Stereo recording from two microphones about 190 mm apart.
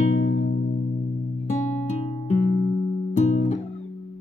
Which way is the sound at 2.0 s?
35° left (ahead or behind).